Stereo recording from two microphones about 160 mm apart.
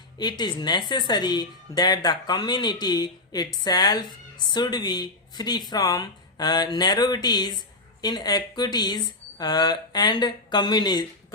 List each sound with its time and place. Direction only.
0.2 s a woman's voice: 25° left (ahead or behind)